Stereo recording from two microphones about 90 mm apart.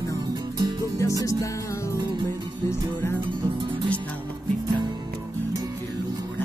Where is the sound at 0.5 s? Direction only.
45° right (ahead or behind).